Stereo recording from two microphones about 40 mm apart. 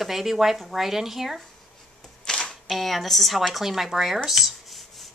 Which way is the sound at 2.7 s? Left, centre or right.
Centre.